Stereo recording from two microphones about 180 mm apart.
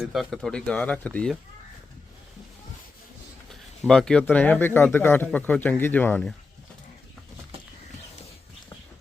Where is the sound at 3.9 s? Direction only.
5° left (ahead or behind).